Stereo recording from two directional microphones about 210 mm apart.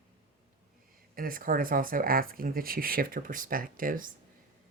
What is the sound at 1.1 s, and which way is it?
Speech, 45° right (ahead or behind).